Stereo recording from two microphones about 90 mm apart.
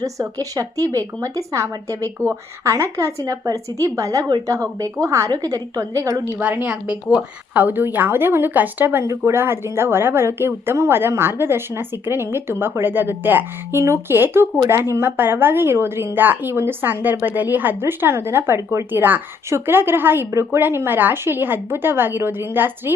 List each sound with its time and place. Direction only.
0.0 s a woman's voice: 40° right (ahead or behind)
6.4 s a woman's voice: 15° right (ahead or behind)